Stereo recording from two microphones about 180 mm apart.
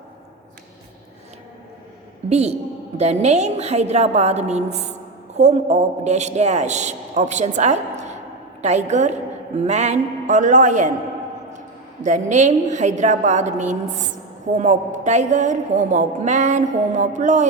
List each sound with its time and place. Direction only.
2.3 s a woman's voice: 35° right (ahead or behind)
12.0 s a woman's voice: 40° right (ahead or behind)